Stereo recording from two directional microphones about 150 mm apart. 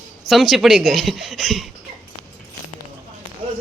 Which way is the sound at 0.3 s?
Centre (ahead or behind).